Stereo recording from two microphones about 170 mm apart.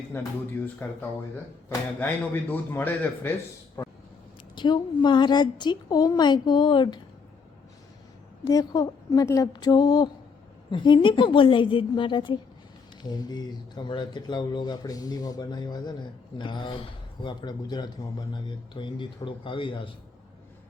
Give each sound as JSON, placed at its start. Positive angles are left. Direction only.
{"t": 0.1, "sound": "a man's voice", "side_deg": 15}
{"t": 2.0, "sound": "a man's voice", "side_deg": 10}
{"t": 4.5, "sound": "speech", "side_deg": 25}
{"t": 8.4, "sound": "speech", "side_deg": 20}